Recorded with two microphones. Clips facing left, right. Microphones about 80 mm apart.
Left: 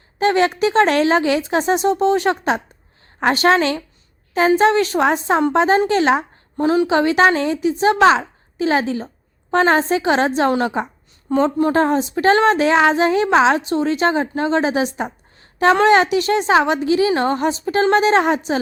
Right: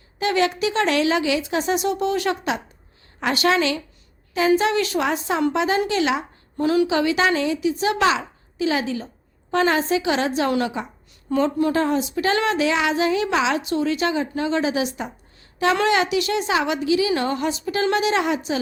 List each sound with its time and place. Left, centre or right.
0.2 s a woman's voice: left